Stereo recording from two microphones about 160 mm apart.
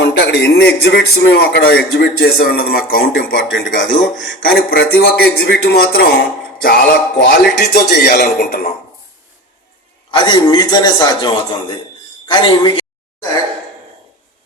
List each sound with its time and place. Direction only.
0.0 s a man's voice: 90° left; by 3.4 s 70° left (ahead or behind)
3.5 s speech: 5° left (ahead or behind)
4.4 s speech: 70° left (ahead or behind); by 6.0 s 90° left
6.6 s speech: 70° left (ahead or behind)
10.1 s a man's voice: 30° left (ahead or behind)
12.3 s a man's voice: 30° left (ahead or behind)